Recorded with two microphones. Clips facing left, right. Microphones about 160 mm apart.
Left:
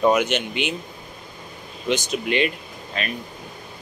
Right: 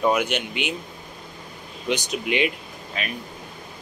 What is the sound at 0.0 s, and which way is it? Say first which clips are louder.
Speech: left 3 dB; centre (ahead or behind).